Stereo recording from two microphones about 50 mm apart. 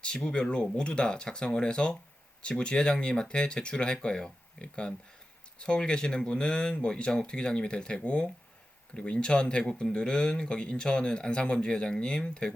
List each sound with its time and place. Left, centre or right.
0.0 s speech: centre